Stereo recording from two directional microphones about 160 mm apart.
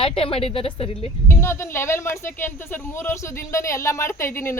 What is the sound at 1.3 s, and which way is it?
Speech, 15° left (ahead or behind).